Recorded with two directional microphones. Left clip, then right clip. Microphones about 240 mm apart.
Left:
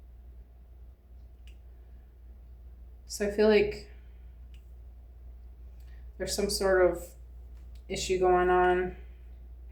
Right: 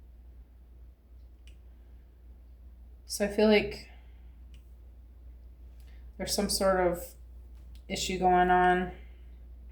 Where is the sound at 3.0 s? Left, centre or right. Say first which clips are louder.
Left 1 dB; right.